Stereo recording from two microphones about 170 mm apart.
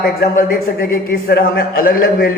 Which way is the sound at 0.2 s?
60° left (ahead or behind).